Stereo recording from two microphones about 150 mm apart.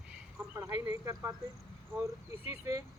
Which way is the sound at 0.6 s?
15° right (ahead or behind).